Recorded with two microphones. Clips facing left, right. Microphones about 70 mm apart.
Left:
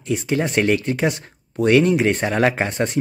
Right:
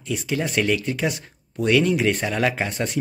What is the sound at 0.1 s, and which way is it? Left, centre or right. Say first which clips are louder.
Speech: left 4 dB; left.